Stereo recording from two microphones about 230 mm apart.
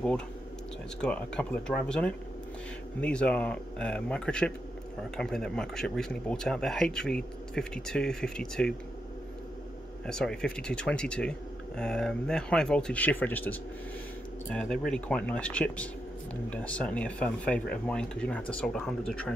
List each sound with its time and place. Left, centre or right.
1.0 s speech: centre
10.0 s speech: centre